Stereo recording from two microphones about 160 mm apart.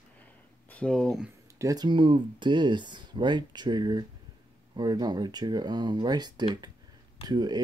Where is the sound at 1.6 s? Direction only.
25° right (ahead or behind).